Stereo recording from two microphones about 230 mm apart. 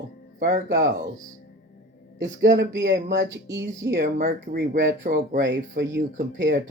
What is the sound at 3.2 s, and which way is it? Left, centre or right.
Speech, centre.